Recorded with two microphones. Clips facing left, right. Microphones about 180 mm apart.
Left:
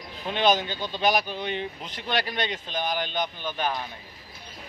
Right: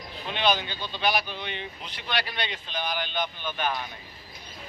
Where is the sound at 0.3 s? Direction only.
45° left (ahead or behind).